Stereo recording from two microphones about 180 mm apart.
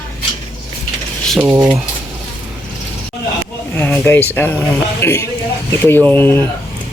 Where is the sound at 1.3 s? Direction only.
15° right (ahead or behind).